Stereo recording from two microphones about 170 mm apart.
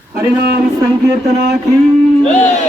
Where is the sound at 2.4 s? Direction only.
40° left (ahead or behind).